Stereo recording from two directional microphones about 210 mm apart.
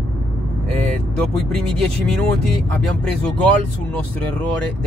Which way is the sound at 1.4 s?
5° left (ahead or behind).